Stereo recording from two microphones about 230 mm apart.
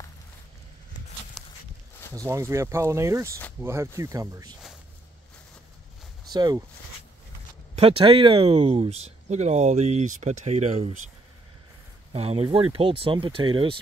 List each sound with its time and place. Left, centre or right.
1.4 s walk: centre
2.1 s speech: centre
6.3 s speech: centre
7.7 s speech: right
12.1 s speech: right